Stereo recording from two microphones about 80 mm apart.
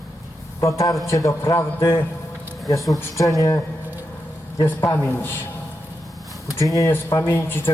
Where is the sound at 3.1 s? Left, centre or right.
Left.